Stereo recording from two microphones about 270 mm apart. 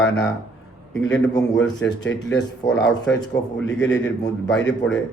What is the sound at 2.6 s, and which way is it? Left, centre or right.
Speech, centre.